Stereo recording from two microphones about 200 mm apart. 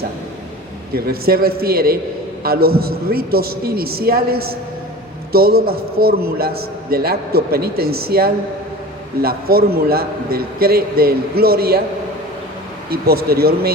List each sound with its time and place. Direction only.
0.9 s a man's voice: 50° right (ahead or behind)
12.9 s a man's voice: 50° right (ahead or behind)